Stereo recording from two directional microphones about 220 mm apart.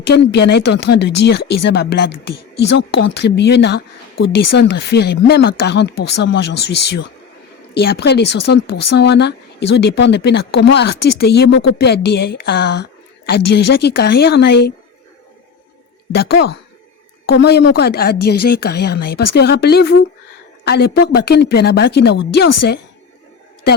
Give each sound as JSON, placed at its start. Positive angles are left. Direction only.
{"t": 0.0, "sound": "speech", "side_deg": 50}
{"t": 16.1, "sound": "speech", "side_deg": 50}